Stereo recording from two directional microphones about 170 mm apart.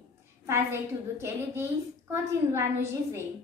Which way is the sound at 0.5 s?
15° right (ahead or behind).